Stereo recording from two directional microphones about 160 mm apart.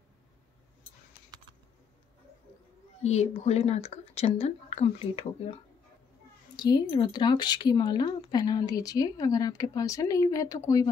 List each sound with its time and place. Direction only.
3.0 s speech: 45° left (ahead or behind)
6.5 s speech: 25° left (ahead or behind)